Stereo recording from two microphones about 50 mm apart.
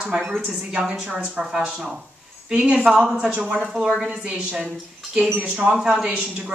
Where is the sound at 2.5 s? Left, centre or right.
Right.